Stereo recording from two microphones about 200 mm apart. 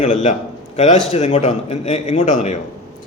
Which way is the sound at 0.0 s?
35° left (ahead or behind).